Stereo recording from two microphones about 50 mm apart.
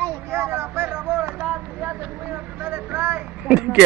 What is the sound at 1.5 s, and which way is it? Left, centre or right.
Vehicle, right.